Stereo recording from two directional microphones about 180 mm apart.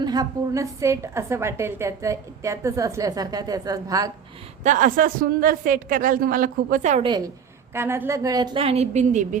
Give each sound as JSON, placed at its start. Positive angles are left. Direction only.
{"t": 0.0, "sound": "a woman's voice", "side_deg": -20}
{"t": 4.6, "sound": "a woman's voice", "side_deg": -45}
{"t": 7.0, "sound": "a woman's voice", "side_deg": -25}
{"t": 7.7, "sound": "a woman's voice", "side_deg": -15}